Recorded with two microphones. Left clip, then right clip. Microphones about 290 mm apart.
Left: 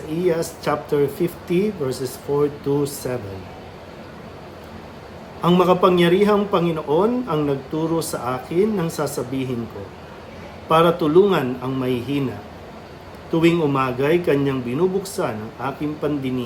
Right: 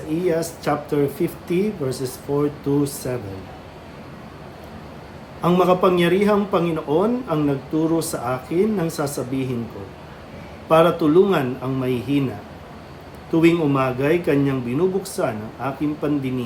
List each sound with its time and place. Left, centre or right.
0.3 s a man's voice: centre
5.4 s a man's voice: centre
10.7 s a man's voice: centre
13.3 s a man's voice: centre